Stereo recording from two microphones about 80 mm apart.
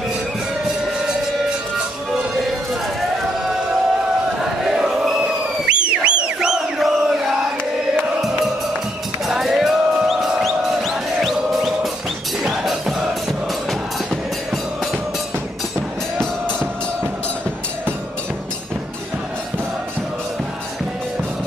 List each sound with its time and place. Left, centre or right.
4.4 s a sound: centre
5.7 s battle cry: centre
9.2 s music: centre
16.2 s music: centre